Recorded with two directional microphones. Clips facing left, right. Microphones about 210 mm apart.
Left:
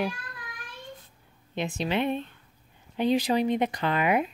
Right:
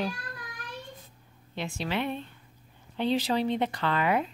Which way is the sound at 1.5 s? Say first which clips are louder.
Left 4 dB; 20° left (ahead or behind).